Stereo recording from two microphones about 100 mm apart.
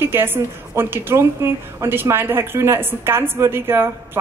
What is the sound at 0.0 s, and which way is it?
A woman's voice, 20° right (ahead or behind).